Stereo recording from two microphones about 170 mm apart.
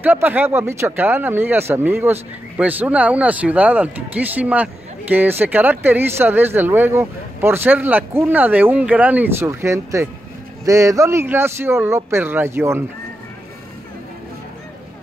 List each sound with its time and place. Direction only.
0.0 s speech: 10° right (ahead or behind)